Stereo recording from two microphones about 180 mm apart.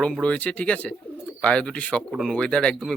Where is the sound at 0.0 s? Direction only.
5° left (ahead or behind).